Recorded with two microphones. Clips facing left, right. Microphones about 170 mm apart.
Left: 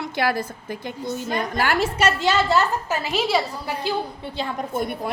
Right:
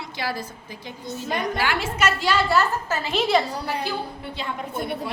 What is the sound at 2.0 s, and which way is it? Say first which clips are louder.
Speech: even; 25° left (ahead or behind).